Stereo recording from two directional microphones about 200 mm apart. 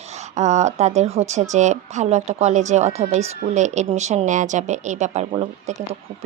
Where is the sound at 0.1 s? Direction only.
35° right (ahead or behind).